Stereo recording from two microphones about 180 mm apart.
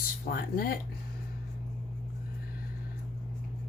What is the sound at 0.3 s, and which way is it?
Speech, 55° left (ahead or behind).